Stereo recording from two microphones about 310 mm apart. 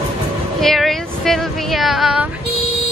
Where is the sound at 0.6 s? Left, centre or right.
Centre.